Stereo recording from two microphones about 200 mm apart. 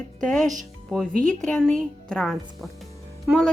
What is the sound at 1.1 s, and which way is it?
Speech, 40° right (ahead or behind).